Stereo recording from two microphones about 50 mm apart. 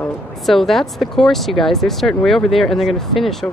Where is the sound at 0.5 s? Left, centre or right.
Centre.